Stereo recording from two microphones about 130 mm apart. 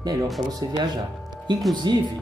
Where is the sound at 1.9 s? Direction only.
35° right (ahead or behind).